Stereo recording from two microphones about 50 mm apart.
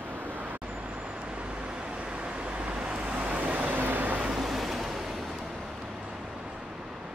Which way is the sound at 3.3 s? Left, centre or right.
Right.